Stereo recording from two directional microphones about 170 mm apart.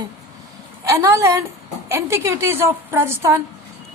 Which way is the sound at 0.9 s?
20° right (ahead or behind).